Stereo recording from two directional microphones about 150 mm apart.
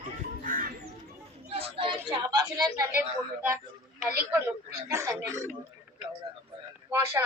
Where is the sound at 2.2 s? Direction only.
25° right (ahead or behind).